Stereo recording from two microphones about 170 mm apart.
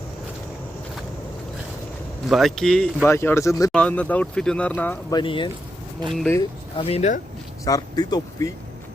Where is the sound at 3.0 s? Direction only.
15° left (ahead or behind).